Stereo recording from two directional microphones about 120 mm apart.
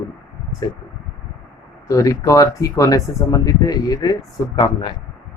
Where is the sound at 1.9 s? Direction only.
30° left (ahead or behind).